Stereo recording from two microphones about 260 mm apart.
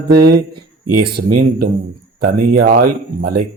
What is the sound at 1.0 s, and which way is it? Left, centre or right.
A man's voice, right.